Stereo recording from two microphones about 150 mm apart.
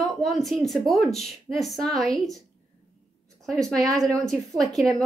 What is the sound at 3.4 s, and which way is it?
A woman's voice, 5° left (ahead or behind).